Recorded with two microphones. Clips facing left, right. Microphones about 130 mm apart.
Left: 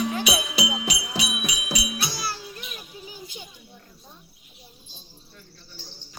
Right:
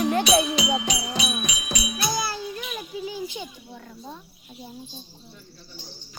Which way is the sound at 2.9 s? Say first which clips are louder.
Right 14 dB; 90° right.